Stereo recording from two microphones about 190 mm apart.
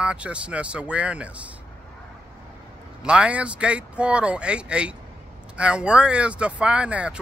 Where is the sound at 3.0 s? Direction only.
5° right (ahead or behind).